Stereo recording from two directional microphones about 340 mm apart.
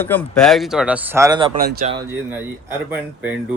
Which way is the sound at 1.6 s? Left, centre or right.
Right.